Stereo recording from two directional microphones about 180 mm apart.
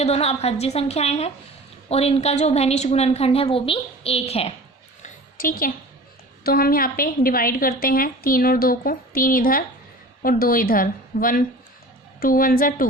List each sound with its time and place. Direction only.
0.0 s a woman's voice: 35° left (ahead or behind)
5.0 s a sound: 50° left (ahead or behind)
6.4 s a woman's voice: 55° left (ahead or behind)